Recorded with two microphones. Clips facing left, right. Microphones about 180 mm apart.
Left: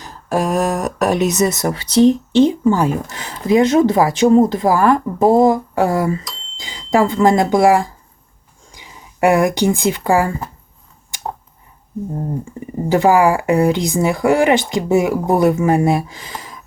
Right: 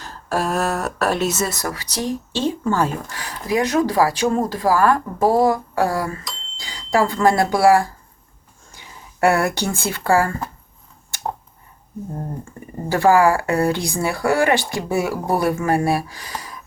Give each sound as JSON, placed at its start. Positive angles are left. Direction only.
{"t": 0.0, "sound": "speech", "side_deg": 15}
{"t": 12.5, "sound": "speech", "side_deg": 20}